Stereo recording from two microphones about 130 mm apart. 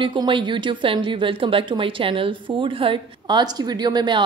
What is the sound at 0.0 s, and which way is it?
A woman's voice, 40° right (ahead or behind).